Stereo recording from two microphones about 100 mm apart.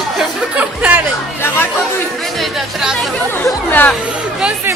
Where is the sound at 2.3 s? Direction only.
Centre (ahead or behind).